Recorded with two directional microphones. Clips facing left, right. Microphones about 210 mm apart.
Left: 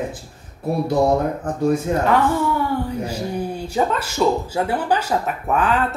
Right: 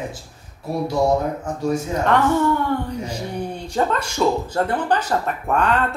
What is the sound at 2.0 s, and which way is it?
Speech, 5° left (ahead or behind).